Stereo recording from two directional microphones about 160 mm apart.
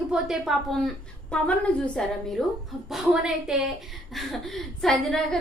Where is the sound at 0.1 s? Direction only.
Centre (ahead or behind).